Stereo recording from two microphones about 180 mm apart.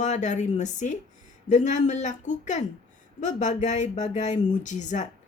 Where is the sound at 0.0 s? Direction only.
40° left (ahead or behind).